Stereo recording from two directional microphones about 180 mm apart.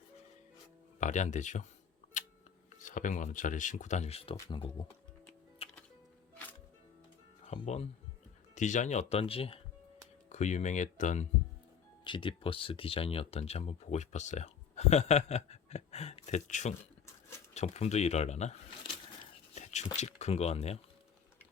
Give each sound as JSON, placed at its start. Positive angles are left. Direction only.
{"t": 0.9, "sound": "speech", "side_deg": 40}
{"t": 2.8, "sound": "speech", "side_deg": 45}
{"t": 5.6, "sound": "music", "side_deg": 35}
{"t": 7.4, "sound": "speech", "side_deg": 40}
{"t": 12.0, "sound": "speech", "side_deg": 25}
{"t": 19.5, "sound": "a sound", "side_deg": 40}
{"t": 20.0, "sound": "speech", "side_deg": 40}